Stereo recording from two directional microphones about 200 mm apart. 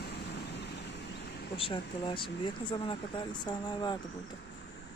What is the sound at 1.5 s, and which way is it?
Speech, 25° left (ahead or behind).